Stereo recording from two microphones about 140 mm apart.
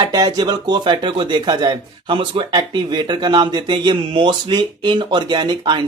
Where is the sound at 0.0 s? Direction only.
30° right (ahead or behind).